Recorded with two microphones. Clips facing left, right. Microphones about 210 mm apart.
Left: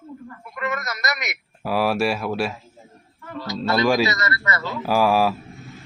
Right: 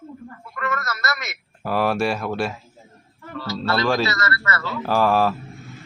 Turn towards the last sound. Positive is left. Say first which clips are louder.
# even
turn(degrees=10)  # may be behind; listen again after turning